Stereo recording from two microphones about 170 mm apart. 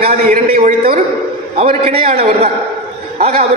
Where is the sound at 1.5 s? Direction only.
40° right (ahead or behind).